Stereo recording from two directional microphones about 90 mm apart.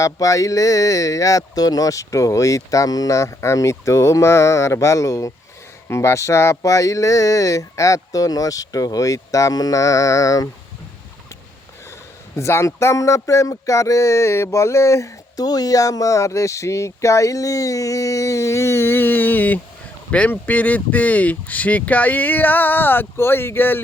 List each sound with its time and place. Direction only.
0.0 s speech: 35° left (ahead or behind)
12.4 s speech: 30° left (ahead or behind)